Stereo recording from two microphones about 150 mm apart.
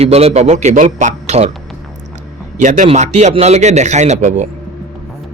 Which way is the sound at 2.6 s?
55° right (ahead or behind).